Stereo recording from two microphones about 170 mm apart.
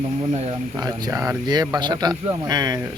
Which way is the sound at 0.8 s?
25° right (ahead or behind).